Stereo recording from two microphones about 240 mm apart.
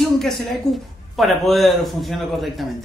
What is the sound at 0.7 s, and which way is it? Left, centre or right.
A man's voice, centre.